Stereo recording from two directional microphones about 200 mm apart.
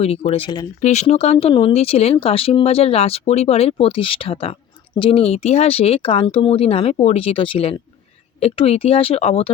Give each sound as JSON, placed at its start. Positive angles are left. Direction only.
{"t": 0.0, "sound": "speech", "side_deg": 30}
{"t": 0.8, "sound": "speech", "side_deg": 35}